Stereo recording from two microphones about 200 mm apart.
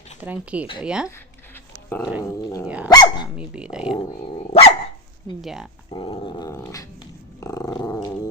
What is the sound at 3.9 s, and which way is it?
Dog, 30° left (ahead or behind).